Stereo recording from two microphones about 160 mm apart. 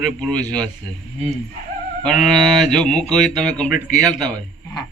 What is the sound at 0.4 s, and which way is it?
Speech, 25° right (ahead or behind).